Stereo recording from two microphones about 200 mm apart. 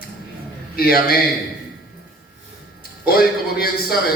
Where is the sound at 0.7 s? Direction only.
50° left (ahead or behind).